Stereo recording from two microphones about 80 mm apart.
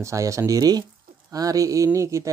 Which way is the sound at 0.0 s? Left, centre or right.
Right.